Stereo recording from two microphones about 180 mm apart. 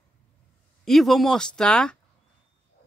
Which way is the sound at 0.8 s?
Centre (ahead or behind).